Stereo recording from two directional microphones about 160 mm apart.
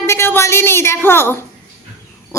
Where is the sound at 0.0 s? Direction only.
15° left (ahead or behind).